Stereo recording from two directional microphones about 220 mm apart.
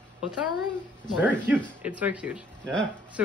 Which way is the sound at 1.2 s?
5° right (ahead or behind).